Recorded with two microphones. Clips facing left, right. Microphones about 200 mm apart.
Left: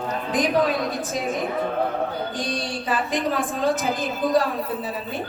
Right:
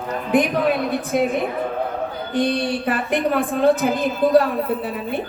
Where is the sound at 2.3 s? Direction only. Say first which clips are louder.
Right 8 dB; 60° right (ahead or behind).